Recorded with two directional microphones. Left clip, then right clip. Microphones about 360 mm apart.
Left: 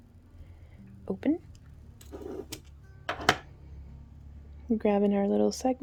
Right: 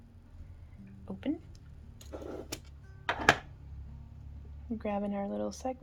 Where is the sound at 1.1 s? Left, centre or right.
Centre.